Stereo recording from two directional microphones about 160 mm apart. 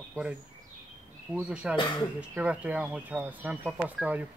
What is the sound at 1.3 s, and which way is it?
Speech, 5° right (ahead or behind).